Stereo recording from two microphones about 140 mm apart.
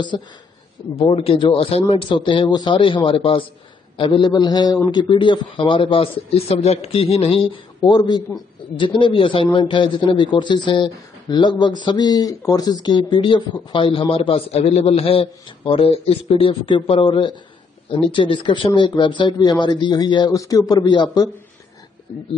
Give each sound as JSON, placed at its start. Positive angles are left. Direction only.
{"t": 0.1, "sound": "a man's voice", "side_deg": 35}